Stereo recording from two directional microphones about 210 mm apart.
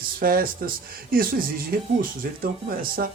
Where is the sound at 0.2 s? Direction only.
45° right (ahead or behind).